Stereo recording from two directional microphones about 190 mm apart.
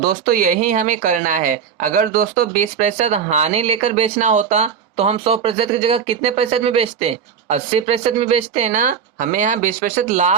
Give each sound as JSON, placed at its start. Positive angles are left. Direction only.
{"t": 0.1, "sound": "a woman's voice", "side_deg": -50}